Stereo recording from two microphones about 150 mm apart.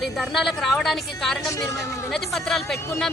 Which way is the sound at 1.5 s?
20° left (ahead or behind).